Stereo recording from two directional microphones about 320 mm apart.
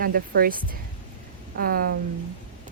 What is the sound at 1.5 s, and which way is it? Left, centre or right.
Speech, right.